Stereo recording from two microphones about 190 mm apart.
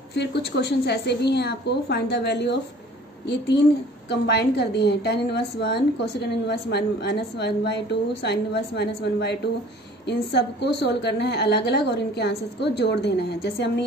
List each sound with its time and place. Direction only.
0.1 s a woman's voice: 60° left (ahead or behind)